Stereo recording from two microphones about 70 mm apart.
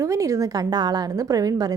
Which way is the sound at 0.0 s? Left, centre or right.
Right.